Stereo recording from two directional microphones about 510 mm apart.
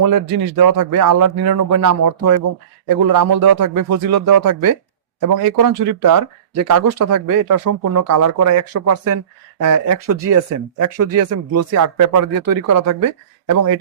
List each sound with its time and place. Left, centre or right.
0.0 s speech: right